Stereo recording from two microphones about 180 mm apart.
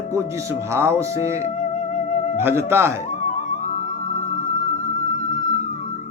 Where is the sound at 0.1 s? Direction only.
15° right (ahead or behind).